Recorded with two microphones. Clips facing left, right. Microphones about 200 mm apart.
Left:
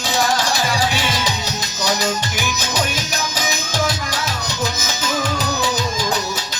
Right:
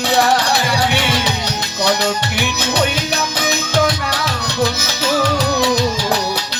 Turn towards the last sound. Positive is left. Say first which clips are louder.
# right 3 dB
turn(degrees=-65)  # may be behind; listen again after turning